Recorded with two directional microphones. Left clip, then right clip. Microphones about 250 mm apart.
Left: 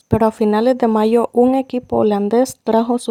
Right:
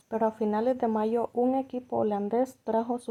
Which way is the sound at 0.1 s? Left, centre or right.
Left.